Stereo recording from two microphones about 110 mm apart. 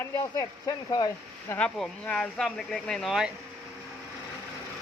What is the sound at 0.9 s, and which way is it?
Speech, 40° left (ahead or behind).